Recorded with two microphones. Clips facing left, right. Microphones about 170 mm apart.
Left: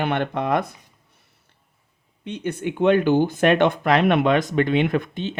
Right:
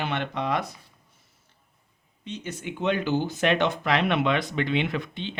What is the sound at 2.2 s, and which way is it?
Speech, 55° left (ahead or behind).